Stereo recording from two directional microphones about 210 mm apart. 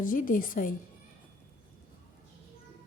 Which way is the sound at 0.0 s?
40° left (ahead or behind).